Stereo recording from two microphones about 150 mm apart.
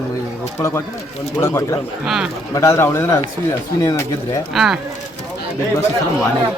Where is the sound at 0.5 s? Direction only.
20° left (ahead or behind).